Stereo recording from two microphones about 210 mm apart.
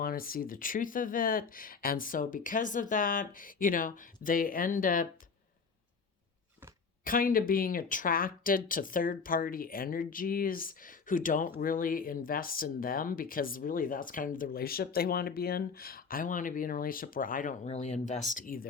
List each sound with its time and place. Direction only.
0.0 s speech: 45° left (ahead or behind)
7.0 s speech: 40° left (ahead or behind)